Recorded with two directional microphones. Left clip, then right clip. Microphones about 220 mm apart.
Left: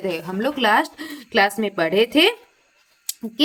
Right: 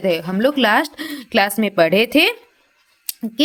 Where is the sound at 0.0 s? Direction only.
35° right (ahead or behind).